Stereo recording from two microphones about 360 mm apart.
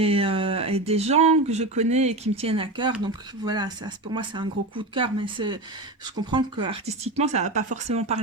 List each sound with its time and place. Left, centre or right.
0.0 s speech: centre